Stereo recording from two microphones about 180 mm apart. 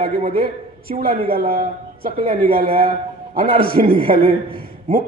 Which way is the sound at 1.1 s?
55° right (ahead or behind).